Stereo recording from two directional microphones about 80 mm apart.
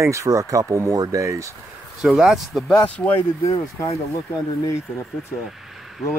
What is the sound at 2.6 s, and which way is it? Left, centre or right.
Speech, centre.